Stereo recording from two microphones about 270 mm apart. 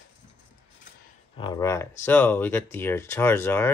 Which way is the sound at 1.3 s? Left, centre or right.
Centre.